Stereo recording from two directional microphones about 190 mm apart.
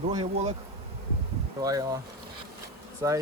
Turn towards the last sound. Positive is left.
turn(degrees=-15)  # may be behind; listen again after turning